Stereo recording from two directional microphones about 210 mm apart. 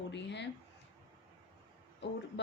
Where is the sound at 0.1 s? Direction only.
55° left (ahead or behind).